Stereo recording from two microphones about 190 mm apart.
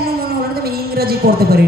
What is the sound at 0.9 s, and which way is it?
Speech, 55° right (ahead or behind).